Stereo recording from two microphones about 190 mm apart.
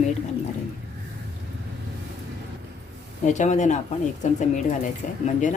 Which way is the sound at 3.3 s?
40° left (ahead or behind).